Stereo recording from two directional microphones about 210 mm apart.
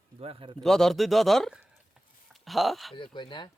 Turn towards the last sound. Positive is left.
turn(degrees=20)  # may be behind; listen again after turning